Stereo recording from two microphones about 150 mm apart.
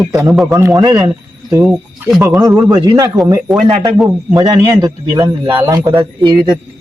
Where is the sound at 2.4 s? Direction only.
25° right (ahead or behind).